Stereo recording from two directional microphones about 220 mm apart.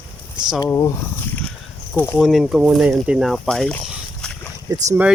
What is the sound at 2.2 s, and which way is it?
Speech, centre (ahead or behind).